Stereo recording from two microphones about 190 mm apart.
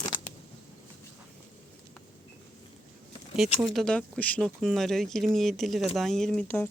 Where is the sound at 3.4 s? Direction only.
Centre (ahead or behind).